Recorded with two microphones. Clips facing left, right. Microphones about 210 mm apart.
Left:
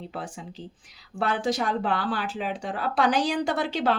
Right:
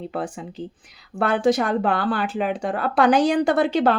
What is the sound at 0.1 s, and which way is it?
Speech, 55° right (ahead or behind).